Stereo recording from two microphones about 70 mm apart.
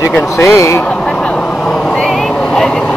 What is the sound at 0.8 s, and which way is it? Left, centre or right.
Vehicle, centre.